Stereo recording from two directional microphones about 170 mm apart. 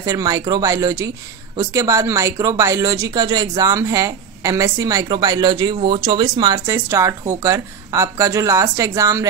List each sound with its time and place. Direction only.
0.0 s speech: 20° right (ahead or behind)